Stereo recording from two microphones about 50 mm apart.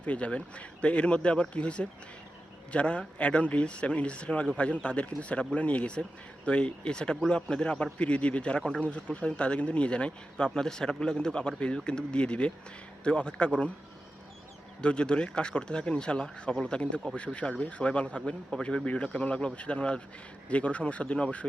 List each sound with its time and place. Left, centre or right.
0.0 s speech: left
14.8 s speech: left